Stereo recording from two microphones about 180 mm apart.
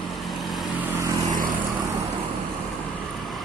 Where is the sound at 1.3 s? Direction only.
50° right (ahead or behind).